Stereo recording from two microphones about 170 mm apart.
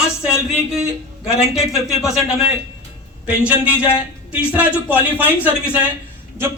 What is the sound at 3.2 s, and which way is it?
A man's voice, 5° right (ahead or behind).